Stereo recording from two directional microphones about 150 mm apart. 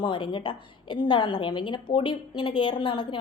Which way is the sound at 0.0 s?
30° left (ahead or behind).